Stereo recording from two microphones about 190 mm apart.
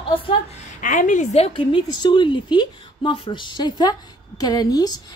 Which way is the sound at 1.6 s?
25° left (ahead or behind).